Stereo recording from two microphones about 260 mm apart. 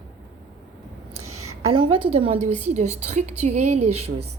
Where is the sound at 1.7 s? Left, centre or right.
Centre.